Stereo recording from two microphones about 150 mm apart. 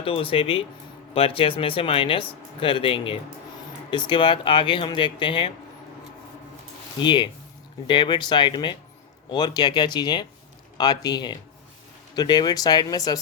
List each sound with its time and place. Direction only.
0.0 s speech: 35° left (ahead or behind)
7.0 s speech: 30° left (ahead or behind)